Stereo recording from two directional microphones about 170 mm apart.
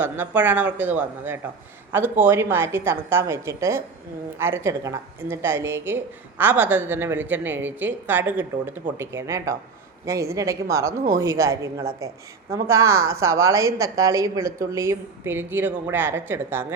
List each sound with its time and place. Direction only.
0.0 s speech: 10° right (ahead or behind)